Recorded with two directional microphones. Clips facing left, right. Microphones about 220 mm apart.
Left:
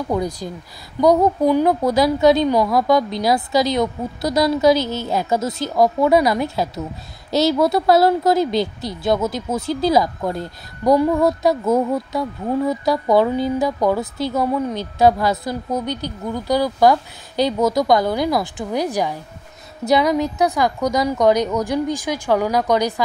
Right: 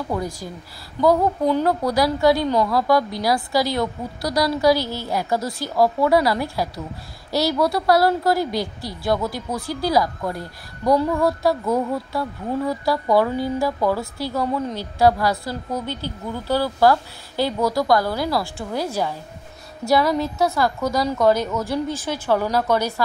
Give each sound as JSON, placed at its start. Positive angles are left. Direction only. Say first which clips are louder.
{"t": 0.1, "sound": "a woman's voice", "louder": "left 4 dB", "side_deg": 20}